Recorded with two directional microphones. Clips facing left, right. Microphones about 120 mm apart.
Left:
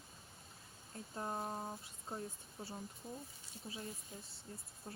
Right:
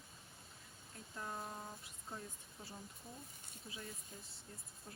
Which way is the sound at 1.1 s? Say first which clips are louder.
Left 5 dB; 35° left (ahead or behind).